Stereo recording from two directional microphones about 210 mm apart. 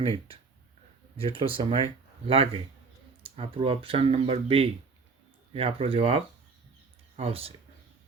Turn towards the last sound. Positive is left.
turn(degrees=-25)  # may be behind; listen again after turning